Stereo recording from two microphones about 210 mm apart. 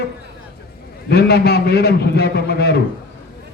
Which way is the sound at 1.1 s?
50° left (ahead or behind).